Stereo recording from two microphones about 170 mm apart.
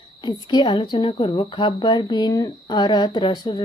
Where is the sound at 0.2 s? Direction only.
25° left (ahead or behind).